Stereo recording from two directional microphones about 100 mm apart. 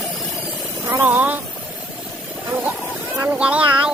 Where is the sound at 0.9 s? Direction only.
25° right (ahead or behind).